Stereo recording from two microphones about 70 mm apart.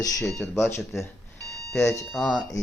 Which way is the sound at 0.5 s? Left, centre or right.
Left.